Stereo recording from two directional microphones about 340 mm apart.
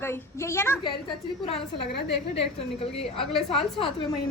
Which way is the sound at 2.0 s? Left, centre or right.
Left.